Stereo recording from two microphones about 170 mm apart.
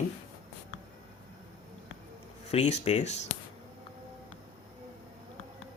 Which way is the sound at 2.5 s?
40° left (ahead or behind).